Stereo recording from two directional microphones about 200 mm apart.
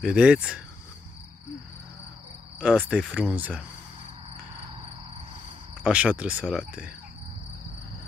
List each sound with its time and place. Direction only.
0.0 s speech: 5° right (ahead or behind)
2.6 s speech: 5° right (ahead or behind)
5.9 s speech: 5° right (ahead or behind)